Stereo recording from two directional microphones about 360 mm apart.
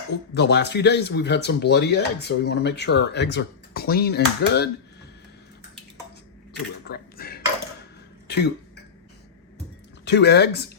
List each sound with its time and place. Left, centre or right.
0.3 s speech: left
6.5 s a sound: left
8.3 s cough: left
10.1 s speech: left